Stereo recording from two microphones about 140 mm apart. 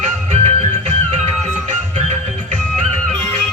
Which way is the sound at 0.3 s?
55° right (ahead or behind).